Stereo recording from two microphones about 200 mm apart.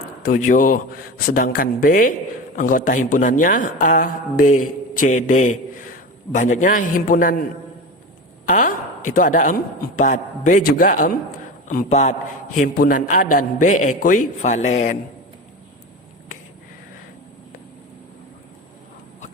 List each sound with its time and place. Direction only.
0.2 s speech: 40° left (ahead or behind)
8.4 s speech: 40° left (ahead or behind)